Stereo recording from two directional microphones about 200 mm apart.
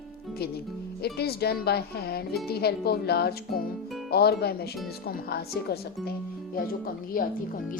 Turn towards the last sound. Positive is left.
turn(degrees=45)  # may be behind; listen again after turning